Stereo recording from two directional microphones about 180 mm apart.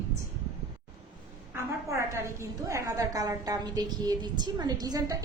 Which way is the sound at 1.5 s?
15° right (ahead or behind).